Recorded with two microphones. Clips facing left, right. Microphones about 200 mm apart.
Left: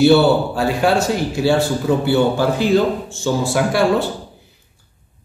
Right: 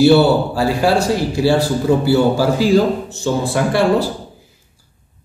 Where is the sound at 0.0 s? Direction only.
Centre (ahead or behind).